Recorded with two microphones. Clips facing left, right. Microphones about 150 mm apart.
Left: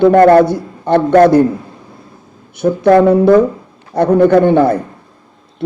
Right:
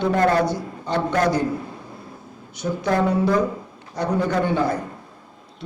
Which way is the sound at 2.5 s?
55° left (ahead or behind).